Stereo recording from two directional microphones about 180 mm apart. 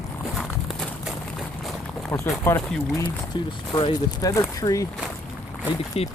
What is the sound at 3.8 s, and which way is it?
Speech, 25° left (ahead or behind).